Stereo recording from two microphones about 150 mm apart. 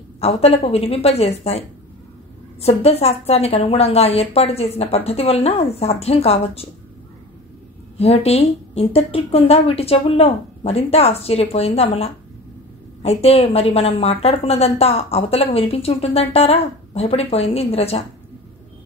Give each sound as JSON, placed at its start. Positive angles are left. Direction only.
{"t": 0.2, "sound": "a woman's voice", "side_deg": 40}
{"t": 2.6, "sound": "a woman's voice", "side_deg": 40}
{"t": 8.0, "sound": "a woman's voice", "side_deg": 45}